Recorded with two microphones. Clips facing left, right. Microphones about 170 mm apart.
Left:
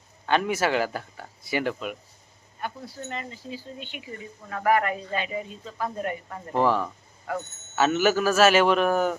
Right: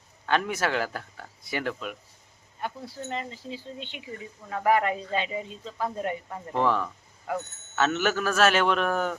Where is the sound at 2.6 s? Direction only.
30° right (ahead or behind).